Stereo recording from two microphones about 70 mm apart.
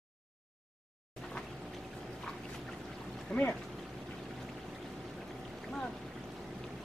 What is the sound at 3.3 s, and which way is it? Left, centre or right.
Pour, centre.